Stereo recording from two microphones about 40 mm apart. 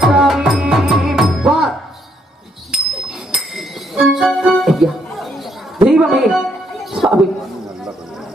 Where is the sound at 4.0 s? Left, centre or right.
Centre.